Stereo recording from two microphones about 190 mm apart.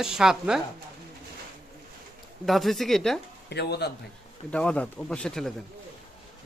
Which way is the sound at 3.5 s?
60° left (ahead or behind).